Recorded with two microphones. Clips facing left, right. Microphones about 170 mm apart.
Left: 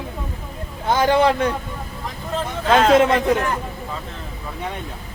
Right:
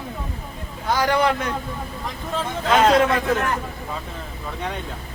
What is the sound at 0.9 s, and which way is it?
Speech, 25° left (ahead or behind).